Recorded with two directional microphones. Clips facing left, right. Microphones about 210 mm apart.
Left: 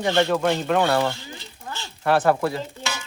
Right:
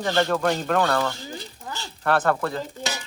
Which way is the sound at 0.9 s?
20° left (ahead or behind).